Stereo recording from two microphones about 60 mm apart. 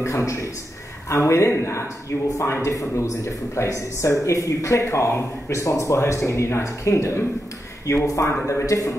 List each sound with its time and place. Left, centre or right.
0.0 s speech: left
2.6 s speech: left